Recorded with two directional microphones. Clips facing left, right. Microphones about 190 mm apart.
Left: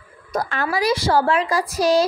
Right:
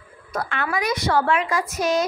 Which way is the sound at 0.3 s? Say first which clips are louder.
Left 3 dB; 40° left (ahead or behind).